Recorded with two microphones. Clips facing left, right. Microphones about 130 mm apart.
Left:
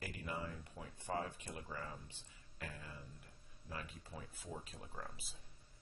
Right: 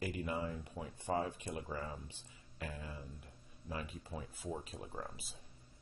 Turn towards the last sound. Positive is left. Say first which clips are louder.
# right 5 dB
turn(degrees=-20)  # may be behind; listen again after turning